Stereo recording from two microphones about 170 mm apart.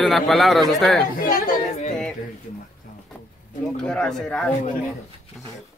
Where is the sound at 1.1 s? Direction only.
55° left (ahead or behind).